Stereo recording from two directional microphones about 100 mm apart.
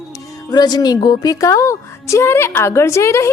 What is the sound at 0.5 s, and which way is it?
A woman's voice, 45° left (ahead or behind).